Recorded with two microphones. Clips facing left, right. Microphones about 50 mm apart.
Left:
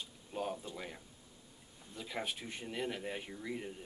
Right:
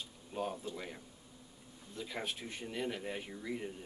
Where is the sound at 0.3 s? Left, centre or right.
Centre.